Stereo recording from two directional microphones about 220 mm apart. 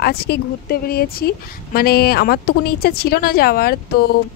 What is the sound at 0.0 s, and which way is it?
Speech, 45° left (ahead or behind).